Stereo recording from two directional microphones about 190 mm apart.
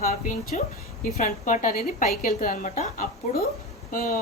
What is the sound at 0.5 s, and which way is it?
A woman's voice, 40° left (ahead or behind).